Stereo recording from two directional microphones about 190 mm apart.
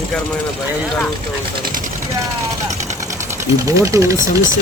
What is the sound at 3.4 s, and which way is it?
Speech, 15° right (ahead or behind).